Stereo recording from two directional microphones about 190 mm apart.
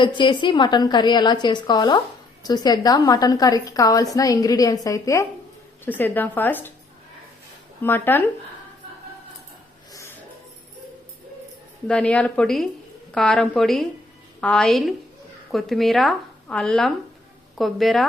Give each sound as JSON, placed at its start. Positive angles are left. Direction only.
{"t": 0.0, "sound": "a woman's voice", "side_deg": 25}
{"t": 7.8, "sound": "speech", "side_deg": 10}
{"t": 11.9, "sound": "speech", "side_deg": 5}